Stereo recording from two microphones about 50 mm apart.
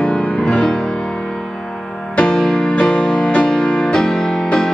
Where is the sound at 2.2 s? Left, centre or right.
Centre.